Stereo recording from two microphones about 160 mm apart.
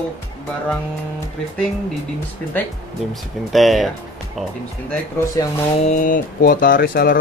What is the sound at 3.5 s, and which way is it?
Speech, centre (ahead or behind).